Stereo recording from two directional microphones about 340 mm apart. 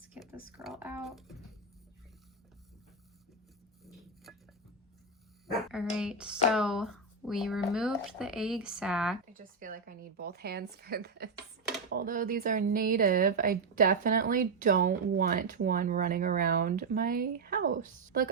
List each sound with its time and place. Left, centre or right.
0.1 s a sound: centre
5.5 s speech: centre
9.3 s speech: right